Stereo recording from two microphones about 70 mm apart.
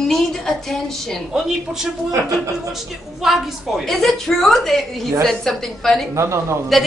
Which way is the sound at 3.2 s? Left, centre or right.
Centre.